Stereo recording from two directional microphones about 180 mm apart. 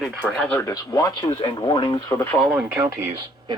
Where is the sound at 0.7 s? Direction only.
20° left (ahead or behind).